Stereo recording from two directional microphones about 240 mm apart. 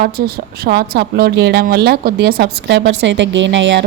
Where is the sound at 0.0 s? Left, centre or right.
Right.